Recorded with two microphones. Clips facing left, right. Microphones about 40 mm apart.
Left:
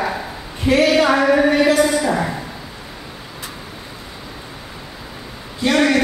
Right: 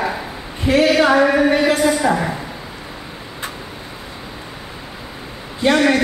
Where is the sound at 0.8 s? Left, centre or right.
Centre.